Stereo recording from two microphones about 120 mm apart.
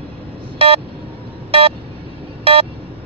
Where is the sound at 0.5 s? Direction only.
50° right (ahead or behind).